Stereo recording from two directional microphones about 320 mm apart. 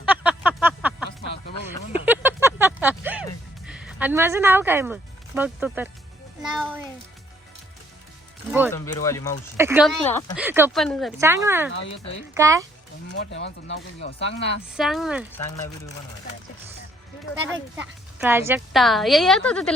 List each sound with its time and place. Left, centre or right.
0.0 s a sound: centre
2.0 s a sound: centre
3.7 s a child's voice: centre
8.7 s speech: centre
9.6 s a woman's voice: centre
10.1 s a woman's voice: centre
10.4 s speech: centre
11.7 s speech: left
12.3 s speech: centre
13.3 s speech: left
14.8 s a woman's voice: centre
17.7 s a woman's voice: centre